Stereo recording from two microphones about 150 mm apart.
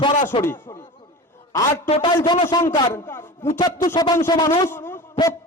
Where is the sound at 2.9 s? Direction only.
15° left (ahead or behind).